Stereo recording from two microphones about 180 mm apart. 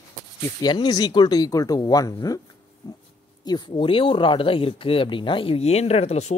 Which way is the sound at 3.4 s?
25° left (ahead or behind).